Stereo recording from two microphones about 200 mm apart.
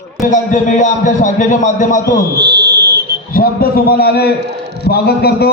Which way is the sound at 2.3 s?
55° right (ahead or behind).